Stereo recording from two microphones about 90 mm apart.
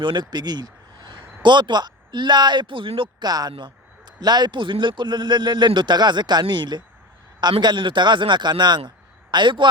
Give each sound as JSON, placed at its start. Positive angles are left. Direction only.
{"t": 0.0, "sound": "speech", "side_deg": -55}
{"t": 3.2, "sound": "a man's voice", "side_deg": -45}